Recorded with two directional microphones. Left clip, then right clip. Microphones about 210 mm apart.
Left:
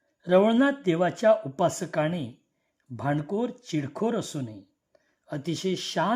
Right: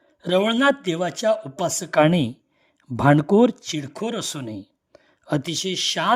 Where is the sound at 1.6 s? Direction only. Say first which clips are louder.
Even; centre (ahead or behind).